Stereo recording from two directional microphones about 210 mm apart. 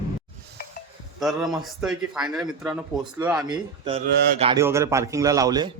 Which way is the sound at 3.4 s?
25° right (ahead or behind).